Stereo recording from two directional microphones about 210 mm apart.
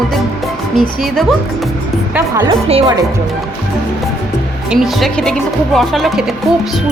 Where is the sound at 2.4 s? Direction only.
25° right (ahead or behind).